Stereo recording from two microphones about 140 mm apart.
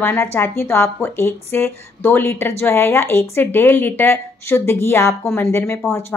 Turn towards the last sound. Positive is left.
turn(degrees=15)  # may be behind; listen again after turning